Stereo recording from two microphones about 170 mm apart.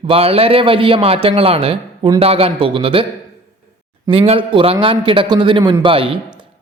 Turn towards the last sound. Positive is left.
turn(degrees=-30)  # may be behind; listen again after turning